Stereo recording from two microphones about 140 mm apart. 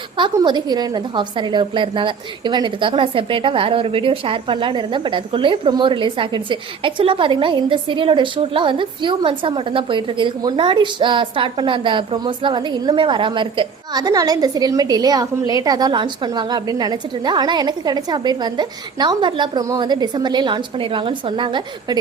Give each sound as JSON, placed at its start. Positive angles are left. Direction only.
{"t": 0.2, "sound": "a woman's voice", "side_deg": -35}